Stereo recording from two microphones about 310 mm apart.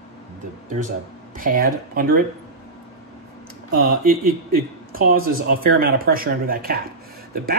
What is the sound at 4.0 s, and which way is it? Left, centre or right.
Speech, right.